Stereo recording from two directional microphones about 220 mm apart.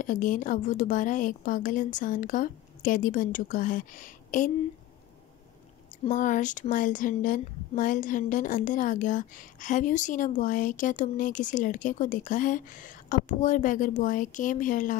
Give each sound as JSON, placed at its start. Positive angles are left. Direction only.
{"t": 0.0, "sound": "a woman's voice", "side_deg": 35}
{"t": 6.0, "sound": "a woman's voice", "side_deg": 35}